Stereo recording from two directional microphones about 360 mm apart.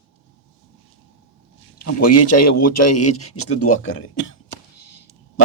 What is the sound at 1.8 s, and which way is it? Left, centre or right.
Speech, left.